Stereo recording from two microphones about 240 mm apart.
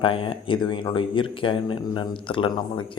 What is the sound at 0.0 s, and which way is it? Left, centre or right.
Speech, left.